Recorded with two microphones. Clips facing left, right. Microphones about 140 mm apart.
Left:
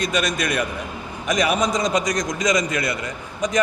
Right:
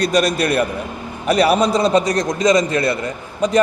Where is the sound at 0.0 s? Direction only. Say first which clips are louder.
Right 6 dB; 35° right (ahead or behind).